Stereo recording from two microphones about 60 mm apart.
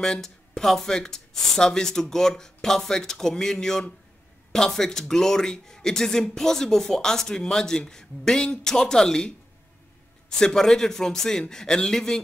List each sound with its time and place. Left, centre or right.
0.0 s speech: centre
10.4 s speech: centre